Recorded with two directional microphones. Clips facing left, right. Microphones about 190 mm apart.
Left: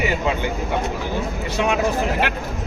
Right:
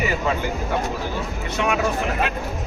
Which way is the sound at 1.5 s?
30° left (ahead or behind).